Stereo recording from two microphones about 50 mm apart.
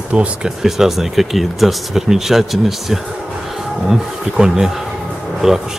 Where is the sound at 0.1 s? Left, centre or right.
Centre.